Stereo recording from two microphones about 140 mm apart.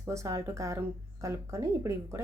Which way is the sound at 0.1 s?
20° right (ahead or behind).